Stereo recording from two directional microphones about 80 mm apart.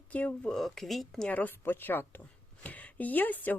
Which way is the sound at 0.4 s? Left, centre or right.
Centre.